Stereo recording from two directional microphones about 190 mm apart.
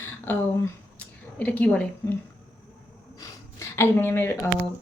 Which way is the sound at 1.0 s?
5° left (ahead or behind).